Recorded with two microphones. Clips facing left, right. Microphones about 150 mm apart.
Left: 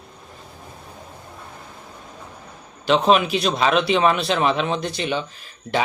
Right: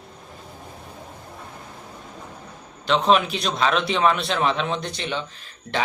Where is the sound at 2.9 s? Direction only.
5° left (ahead or behind).